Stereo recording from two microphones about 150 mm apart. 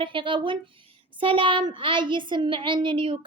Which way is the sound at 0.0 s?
35° right (ahead or behind).